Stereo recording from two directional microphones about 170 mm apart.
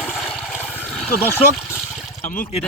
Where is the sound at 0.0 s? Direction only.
5° right (ahead or behind).